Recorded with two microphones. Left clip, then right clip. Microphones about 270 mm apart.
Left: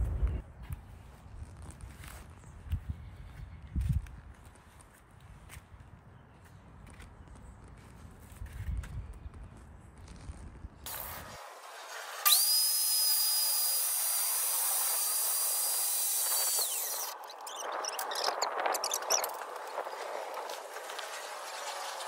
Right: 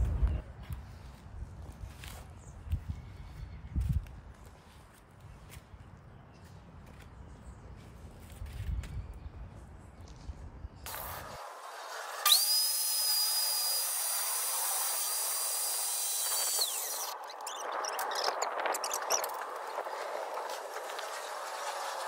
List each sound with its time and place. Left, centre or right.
10.9 s tools: centre